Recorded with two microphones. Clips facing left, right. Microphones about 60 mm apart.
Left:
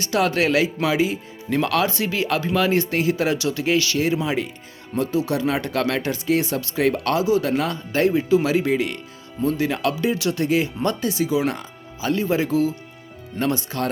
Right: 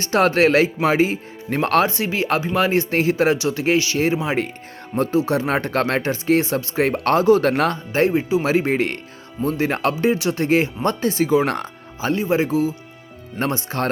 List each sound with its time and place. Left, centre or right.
0.0 s speech: right
1.9 s speech: right
7.9 s speech: right
11.9 s speech: right